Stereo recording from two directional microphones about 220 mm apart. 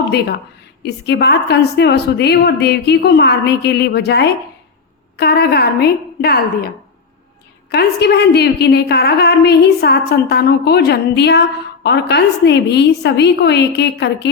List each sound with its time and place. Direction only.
0.8 s a woman's voice: 50° left (ahead or behind)